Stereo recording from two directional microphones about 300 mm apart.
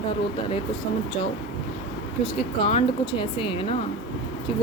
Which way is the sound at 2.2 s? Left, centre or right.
Centre.